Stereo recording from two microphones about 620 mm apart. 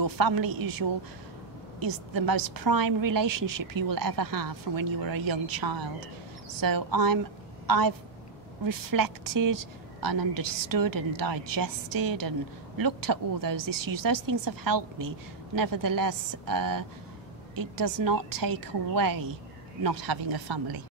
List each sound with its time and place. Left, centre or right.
0.0 s a woman's voice: right